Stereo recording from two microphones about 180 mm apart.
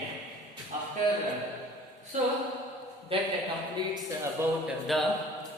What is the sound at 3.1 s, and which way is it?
Speech, 30° right (ahead or behind).